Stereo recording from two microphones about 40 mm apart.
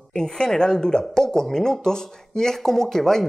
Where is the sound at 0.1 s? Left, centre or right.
Centre.